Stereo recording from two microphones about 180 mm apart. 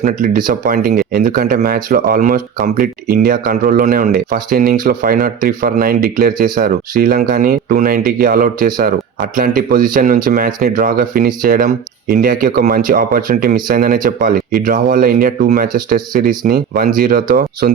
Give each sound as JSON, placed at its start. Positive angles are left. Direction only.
{"t": 0.0, "sound": "speech", "side_deg": -50}